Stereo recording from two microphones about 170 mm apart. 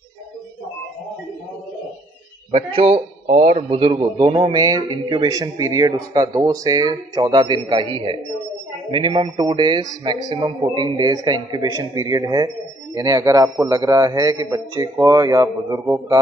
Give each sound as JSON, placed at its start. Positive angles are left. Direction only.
{"t": 2.5, "sound": "a man's voice", "side_deg": -35}